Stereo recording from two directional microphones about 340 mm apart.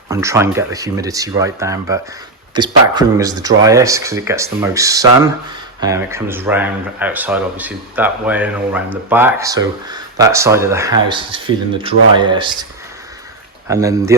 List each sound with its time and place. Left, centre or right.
0.1 s speech: centre
13.7 s speech: centre